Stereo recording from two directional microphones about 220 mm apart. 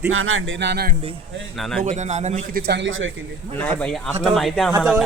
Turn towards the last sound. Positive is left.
turn(degrees=0)  # may be behind; listen again after turning